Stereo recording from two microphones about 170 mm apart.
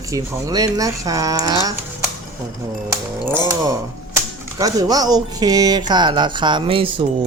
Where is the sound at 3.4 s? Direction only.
20° right (ahead or behind).